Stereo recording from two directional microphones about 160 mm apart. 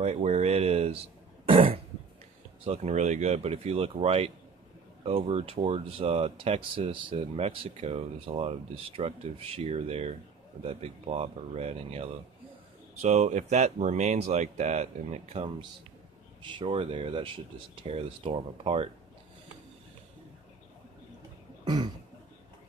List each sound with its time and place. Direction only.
0.0 s speech: 45° right (ahead or behind)
1.5 s throat clearing: 40° right (ahead or behind)
2.6 s speech: 40° right (ahead or behind)
16.4 s speech: 30° right (ahead or behind)
21.6 s throat clearing: 25° right (ahead or behind)